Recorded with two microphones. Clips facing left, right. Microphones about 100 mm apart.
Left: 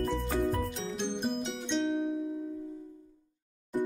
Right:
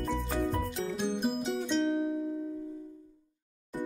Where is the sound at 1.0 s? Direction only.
5° right (ahead or behind).